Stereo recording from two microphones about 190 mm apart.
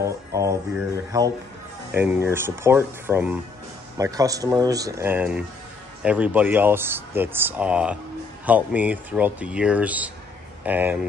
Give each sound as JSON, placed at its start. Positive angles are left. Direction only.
{"t": 0.0, "sound": "speech", "side_deg": -15}